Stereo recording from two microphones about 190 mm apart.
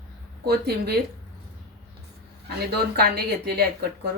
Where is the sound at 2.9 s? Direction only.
55° right (ahead or behind).